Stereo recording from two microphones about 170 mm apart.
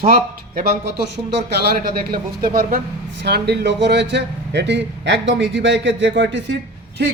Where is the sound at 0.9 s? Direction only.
80° right.